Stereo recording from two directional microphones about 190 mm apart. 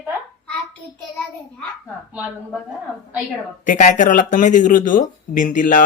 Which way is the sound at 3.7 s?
45° left (ahead or behind).